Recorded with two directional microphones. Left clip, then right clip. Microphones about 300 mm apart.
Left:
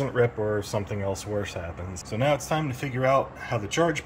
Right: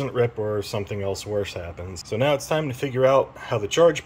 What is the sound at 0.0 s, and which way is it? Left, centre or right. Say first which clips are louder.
Speech: right 1 dB; centre.